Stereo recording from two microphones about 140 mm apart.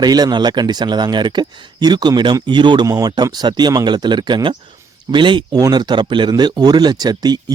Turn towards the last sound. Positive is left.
turn(degrees=-30)  # may be behind; listen again after turning